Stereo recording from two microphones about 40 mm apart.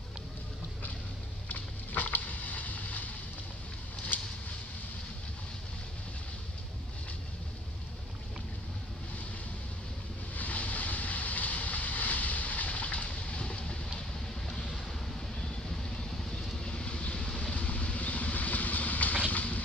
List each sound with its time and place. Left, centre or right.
1.5 s boat: left
4.1 s a sound: left
10.3 s vehicle: left
15.1 s vehicle: centre; by 19.6 s left